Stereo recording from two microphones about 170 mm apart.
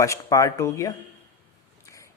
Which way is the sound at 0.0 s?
20° left (ahead or behind).